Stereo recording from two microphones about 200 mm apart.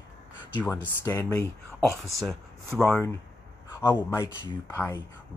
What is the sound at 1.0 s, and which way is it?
Speech, 15° left (ahead or behind).